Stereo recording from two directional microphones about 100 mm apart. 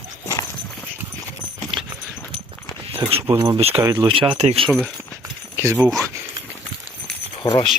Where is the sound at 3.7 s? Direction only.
30° right (ahead or behind).